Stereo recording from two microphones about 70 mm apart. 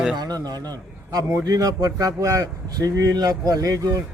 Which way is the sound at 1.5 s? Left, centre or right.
Right.